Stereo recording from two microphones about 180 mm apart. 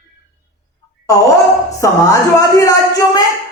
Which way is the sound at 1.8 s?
20° left (ahead or behind).